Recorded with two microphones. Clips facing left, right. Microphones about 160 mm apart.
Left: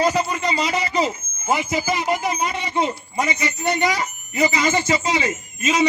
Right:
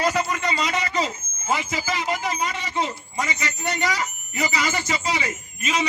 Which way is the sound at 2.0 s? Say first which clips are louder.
Left 4 dB; 20° left (ahead or behind).